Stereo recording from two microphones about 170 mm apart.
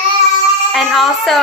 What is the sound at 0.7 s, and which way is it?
Speech, centre (ahead or behind).